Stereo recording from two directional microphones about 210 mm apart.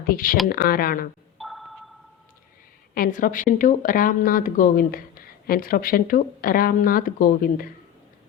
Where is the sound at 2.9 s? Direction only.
40° left (ahead or behind).